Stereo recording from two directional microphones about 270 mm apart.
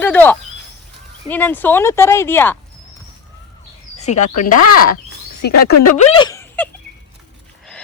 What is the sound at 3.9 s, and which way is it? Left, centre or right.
Speech, left.